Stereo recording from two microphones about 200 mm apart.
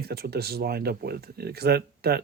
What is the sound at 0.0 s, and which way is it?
Speech, 50° right (ahead or behind).